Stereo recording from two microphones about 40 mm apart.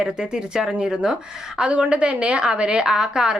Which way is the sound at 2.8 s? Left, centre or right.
Centre.